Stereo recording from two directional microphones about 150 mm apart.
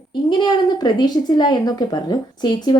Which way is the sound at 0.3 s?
30° left (ahead or behind).